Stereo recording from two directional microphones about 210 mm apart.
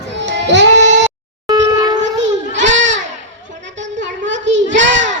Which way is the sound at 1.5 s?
20° right (ahead or behind).